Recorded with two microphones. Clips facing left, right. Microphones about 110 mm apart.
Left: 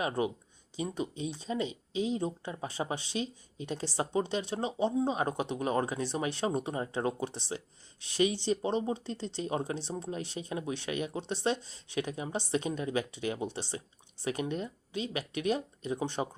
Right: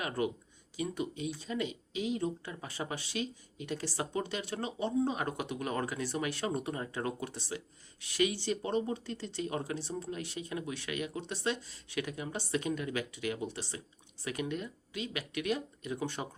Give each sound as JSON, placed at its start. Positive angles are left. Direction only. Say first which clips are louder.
{"t": 0.0, "sound": "speech", "louder": "left 3 dB", "side_deg": 25}